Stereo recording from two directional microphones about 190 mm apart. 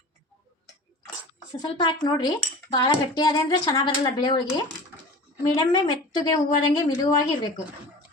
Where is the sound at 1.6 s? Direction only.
25° left (ahead or behind).